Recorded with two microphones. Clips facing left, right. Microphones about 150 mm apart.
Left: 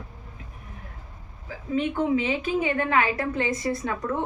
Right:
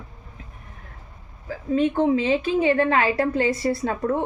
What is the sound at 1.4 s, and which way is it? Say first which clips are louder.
A woman's voice: right 5 dB; 35° right (ahead or behind).